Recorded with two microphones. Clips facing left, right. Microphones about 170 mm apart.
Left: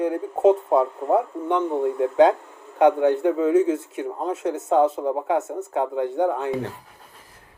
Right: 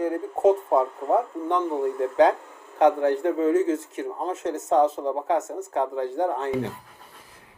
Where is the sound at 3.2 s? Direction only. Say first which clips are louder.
Left 1 dB; 5° left (ahead or behind).